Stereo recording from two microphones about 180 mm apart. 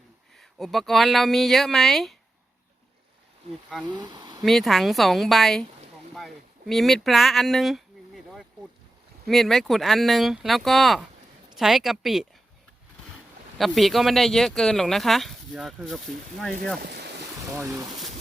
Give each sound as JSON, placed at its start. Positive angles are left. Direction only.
{"t": 0.3, "sound": "speech", "side_deg": 0}
{"t": 3.9, "sound": "speech", "side_deg": -25}
{"t": 4.4, "sound": "speech", "side_deg": 0}
{"t": 6.1, "sound": "a sound", "side_deg": 0}
{"t": 9.2, "sound": "speech", "side_deg": 0}
{"t": 13.6, "sound": "speech", "side_deg": 0}
{"t": 17.6, "sound": "speech", "side_deg": -15}